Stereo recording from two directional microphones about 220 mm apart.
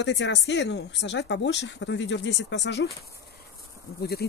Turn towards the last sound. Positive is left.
turn(degrees=45)  # may be behind; listen again after turning